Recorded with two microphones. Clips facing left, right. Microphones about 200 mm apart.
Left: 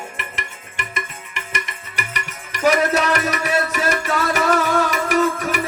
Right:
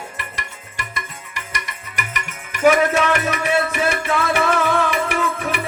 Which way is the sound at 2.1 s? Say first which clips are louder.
Even; 35° left (ahead or behind).